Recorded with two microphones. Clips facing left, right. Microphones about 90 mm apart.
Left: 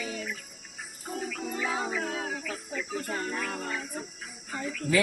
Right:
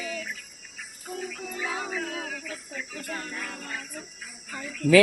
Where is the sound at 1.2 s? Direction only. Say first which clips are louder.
Left 2 dB; 30° left (ahead or behind).